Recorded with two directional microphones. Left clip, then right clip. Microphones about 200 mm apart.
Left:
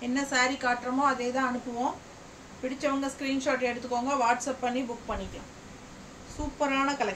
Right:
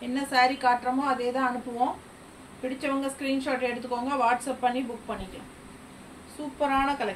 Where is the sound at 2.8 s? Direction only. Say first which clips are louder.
Even; 20° left (ahead or behind).